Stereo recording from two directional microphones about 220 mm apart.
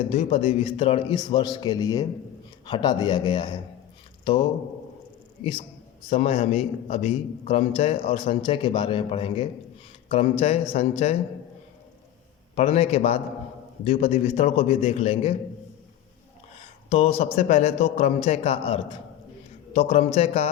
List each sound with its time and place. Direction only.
0.1 s a man's voice: 25° left (ahead or behind)
12.5 s a man's voice: 25° left (ahead or behind)
16.9 s a man's voice: 25° left (ahead or behind)